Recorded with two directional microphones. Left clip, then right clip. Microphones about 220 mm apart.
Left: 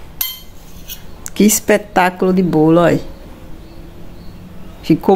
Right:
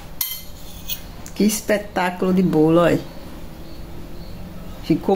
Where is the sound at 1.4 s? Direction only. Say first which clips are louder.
Left 7 dB; 35° left (ahead or behind).